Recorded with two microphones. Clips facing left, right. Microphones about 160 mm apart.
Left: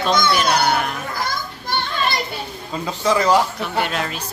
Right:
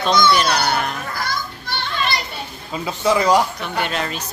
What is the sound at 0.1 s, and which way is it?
Speech, 50° left (ahead or behind).